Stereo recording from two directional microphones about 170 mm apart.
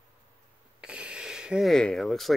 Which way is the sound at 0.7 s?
5° right (ahead or behind).